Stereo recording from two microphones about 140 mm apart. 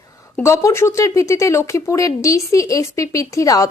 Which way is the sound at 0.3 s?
20° left (ahead or behind).